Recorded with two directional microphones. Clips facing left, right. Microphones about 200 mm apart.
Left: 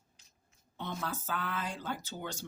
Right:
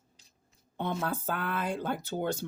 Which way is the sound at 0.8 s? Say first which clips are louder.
Right 6 dB; 55° right (ahead or behind).